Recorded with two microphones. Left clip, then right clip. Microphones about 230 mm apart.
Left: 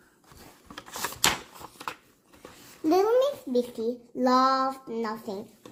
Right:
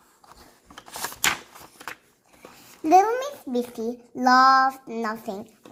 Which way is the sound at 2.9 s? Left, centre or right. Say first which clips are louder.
Right 4 dB; right.